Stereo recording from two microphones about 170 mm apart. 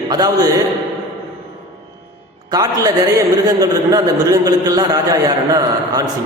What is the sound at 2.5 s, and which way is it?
A man's voice, 20° right (ahead or behind).